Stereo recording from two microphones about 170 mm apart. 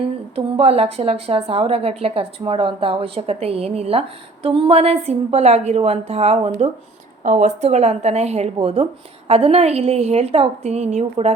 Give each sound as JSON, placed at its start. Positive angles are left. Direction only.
{"t": 0.3, "sound": "a woman's voice", "side_deg": -35}